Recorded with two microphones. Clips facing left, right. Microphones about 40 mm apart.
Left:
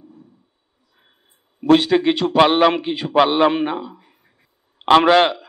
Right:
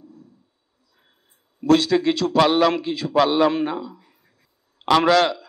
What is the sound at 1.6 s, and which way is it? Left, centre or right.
A man's voice, left.